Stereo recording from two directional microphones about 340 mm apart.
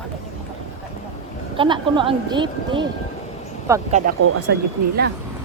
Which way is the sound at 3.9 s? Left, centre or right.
Right.